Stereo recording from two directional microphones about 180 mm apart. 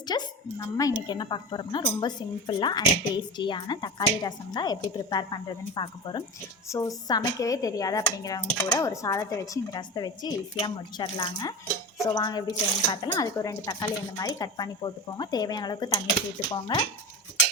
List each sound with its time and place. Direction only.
0.1 s speech: 20° left (ahead or behind)